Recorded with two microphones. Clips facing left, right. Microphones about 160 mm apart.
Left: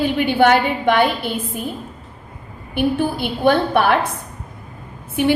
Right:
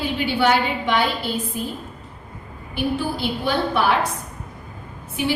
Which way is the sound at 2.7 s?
55° left (ahead or behind).